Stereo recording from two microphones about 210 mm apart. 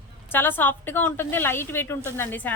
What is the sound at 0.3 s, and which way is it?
A woman's voice, 10° left (ahead or behind).